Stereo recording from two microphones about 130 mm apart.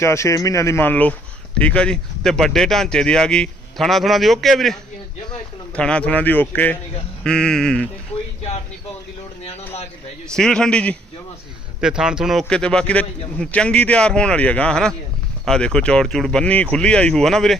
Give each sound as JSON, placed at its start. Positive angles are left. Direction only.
{"t": 0.0, "sound": "a man's voice", "side_deg": 20}
{"t": 10.2, "sound": "speech", "side_deg": 5}
{"t": 11.8, "sound": "a man's voice", "side_deg": -5}